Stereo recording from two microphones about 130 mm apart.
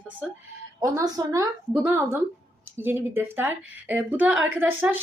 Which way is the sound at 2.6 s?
15° right (ahead or behind).